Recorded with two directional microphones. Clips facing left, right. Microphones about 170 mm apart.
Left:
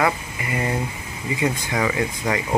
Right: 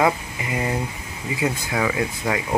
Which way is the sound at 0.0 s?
10° right (ahead or behind).